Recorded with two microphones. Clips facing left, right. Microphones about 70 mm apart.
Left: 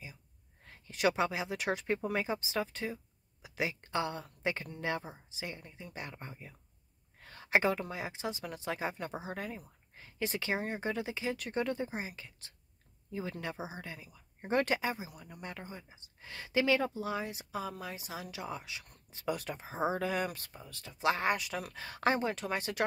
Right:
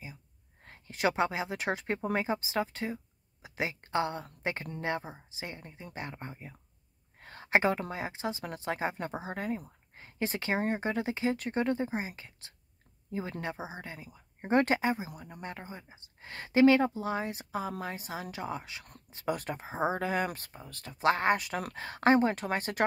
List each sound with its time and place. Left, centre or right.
0.7 s speech: right
16.3 s speech: right
21.7 s speech: right